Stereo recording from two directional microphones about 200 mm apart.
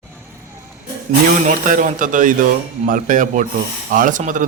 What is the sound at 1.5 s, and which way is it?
Speech, 40° right (ahead or behind).